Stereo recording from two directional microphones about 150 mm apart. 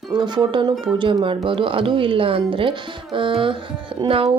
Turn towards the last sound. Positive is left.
turn(degrees=-40)  # may be behind; listen again after turning